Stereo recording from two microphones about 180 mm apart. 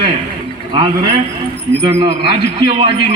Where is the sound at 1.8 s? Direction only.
30° right (ahead or behind).